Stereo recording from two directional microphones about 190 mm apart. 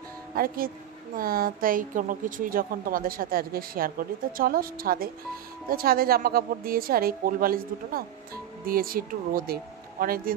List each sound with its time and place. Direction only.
0.3 s speech: 50° right (ahead or behind)